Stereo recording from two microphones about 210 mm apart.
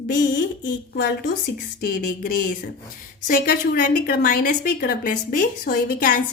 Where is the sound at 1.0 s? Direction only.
50° left (ahead or behind).